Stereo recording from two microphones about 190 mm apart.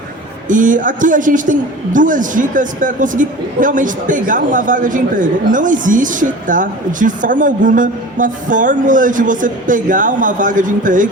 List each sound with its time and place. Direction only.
0.4 s speech: 45° right (ahead or behind)